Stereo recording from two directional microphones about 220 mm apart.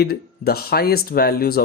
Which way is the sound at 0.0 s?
45° left (ahead or behind).